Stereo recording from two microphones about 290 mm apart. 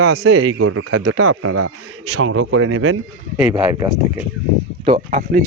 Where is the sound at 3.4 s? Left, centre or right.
Centre.